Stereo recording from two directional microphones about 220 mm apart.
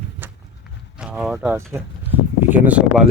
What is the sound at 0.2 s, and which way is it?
Run, 10° right (ahead or behind).